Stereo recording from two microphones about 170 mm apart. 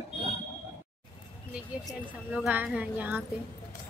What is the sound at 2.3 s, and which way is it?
Speech, 10° right (ahead or behind).